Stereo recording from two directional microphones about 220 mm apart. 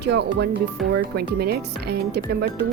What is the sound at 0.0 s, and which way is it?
Speech, 50° right (ahead or behind).